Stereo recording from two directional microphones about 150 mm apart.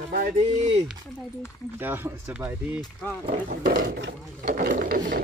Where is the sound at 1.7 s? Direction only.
15° right (ahead or behind).